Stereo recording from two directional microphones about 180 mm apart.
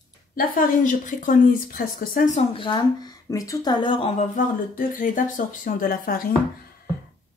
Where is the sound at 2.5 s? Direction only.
25° left (ahead or behind).